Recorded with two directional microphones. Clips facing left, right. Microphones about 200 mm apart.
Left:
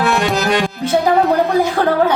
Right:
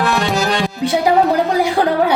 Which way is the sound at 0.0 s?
Centre (ahead or behind).